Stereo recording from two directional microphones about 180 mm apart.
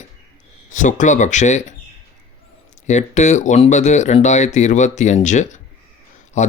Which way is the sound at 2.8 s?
40° left (ahead or behind).